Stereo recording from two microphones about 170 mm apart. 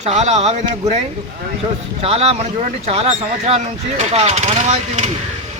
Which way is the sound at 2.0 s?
35° right (ahead or behind).